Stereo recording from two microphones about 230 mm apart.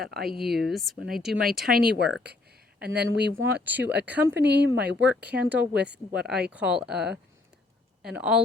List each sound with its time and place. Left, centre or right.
0.0 s speech: right
0.5 s speech: centre
1.3 s speech: right
3.6 s speech: centre
4.4 s speech: right
5.2 s speech: centre